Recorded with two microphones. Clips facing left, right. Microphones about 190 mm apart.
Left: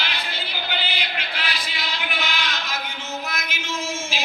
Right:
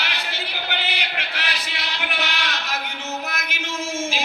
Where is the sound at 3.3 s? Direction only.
60° right (ahead or behind).